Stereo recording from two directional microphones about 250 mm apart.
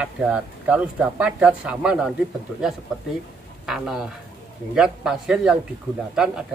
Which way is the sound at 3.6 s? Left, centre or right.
Centre.